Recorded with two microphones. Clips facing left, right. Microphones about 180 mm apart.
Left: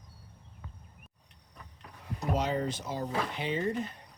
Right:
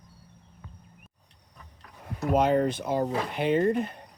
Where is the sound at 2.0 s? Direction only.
55° right (ahead or behind).